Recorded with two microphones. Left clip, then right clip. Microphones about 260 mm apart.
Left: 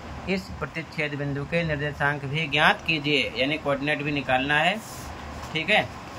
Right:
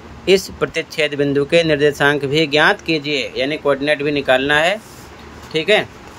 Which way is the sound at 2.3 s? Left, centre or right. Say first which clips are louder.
Right 5 dB; centre.